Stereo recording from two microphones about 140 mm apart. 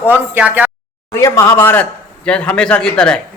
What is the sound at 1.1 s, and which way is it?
A man's voice, 20° left (ahead or behind).